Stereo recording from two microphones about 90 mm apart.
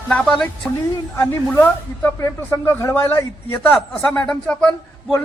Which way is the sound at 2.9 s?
25° left (ahead or behind).